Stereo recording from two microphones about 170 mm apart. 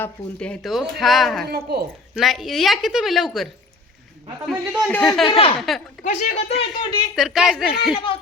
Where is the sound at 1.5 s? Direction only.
65° right (ahead or behind).